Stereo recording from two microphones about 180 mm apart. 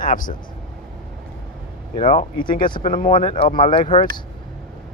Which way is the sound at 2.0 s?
45° left (ahead or behind).